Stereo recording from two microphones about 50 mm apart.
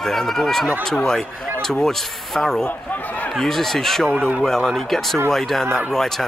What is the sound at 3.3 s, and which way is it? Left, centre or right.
Speech, centre.